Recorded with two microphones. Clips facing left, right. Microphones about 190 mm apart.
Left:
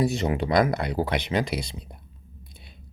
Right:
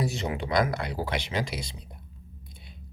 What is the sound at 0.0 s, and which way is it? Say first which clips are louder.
Speech: left 6 dB; 55° left (ahead or behind).